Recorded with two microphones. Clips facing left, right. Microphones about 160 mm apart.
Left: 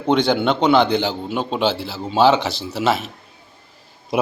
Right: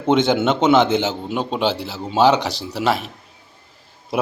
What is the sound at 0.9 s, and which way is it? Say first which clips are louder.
Speech: even; 20° right (ahead or behind).